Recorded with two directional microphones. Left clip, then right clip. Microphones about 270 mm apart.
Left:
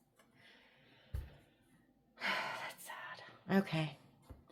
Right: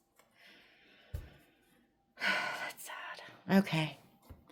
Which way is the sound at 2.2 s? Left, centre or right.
Right.